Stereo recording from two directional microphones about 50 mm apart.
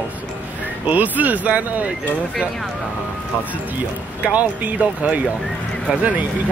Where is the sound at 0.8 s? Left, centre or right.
Right.